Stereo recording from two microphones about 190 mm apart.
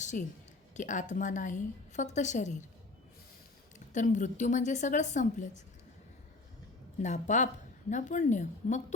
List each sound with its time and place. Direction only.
0.0 s a woman's voice: 40° left (ahead or behind)
3.9 s a woman's voice: 40° left (ahead or behind)
7.0 s a woman's voice: 40° left (ahead or behind)